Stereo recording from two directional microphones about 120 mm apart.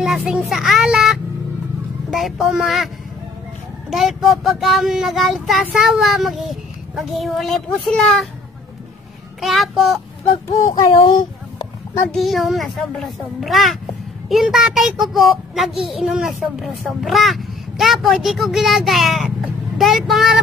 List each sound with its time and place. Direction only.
0.0 s a child's voice: 5° right (ahead or behind)
3.9 s a child's voice: centre (ahead or behind)
9.4 s a child's voice: centre (ahead or behind)
10.7 s child singing: 35° left (ahead or behind)
12.1 s a child's voice: centre (ahead or behind)